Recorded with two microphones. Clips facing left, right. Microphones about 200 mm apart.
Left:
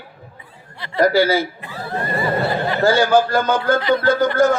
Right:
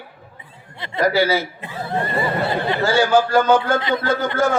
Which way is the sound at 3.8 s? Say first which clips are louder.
Left 4 dB; 20° right (ahead or behind).